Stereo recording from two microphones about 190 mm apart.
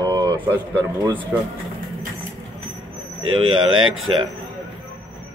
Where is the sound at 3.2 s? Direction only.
90° right.